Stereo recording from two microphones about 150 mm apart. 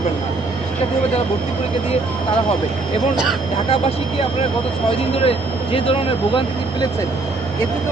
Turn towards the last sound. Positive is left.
turn(degrees=40)  # may be behind; listen again after turning